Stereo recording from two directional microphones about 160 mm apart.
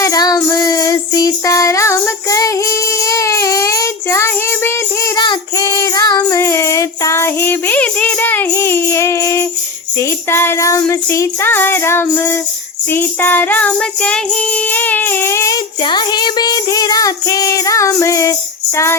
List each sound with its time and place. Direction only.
0.0 s child singing: 25° left (ahead or behind)
5.1 s child singing: 30° left (ahead or behind)
6.3 s music: 15° left (ahead or behind)
15.8 s music: 30° left (ahead or behind)